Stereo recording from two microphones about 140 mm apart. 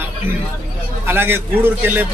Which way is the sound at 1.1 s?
15° right (ahead or behind).